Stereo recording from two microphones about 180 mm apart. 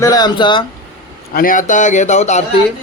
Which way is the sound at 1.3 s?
50° left (ahead or behind).